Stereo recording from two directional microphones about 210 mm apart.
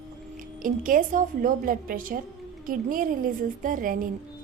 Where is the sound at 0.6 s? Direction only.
40° right (ahead or behind).